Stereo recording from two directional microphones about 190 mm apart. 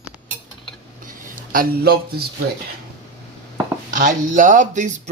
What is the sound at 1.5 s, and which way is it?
Speech, 55° right (ahead or behind).